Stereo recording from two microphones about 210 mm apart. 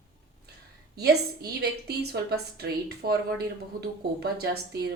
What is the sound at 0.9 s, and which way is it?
A woman's voice, 50° right (ahead or behind).